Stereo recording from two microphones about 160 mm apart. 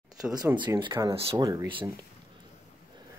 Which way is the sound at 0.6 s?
30° right (ahead or behind).